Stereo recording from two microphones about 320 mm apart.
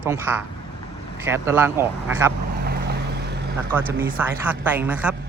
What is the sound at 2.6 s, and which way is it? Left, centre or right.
Boat, right.